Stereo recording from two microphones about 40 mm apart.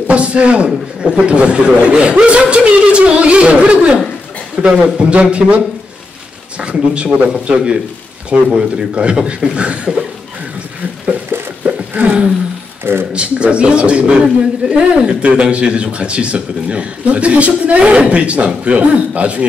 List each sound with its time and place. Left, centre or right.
0.1 s a man's voice: right
6.6 s a man's voice: right
11.6 s a sound: right
13.1 s a man's voice: right